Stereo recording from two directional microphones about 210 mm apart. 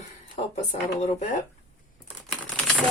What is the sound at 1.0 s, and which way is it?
Speech, 30° left (ahead or behind).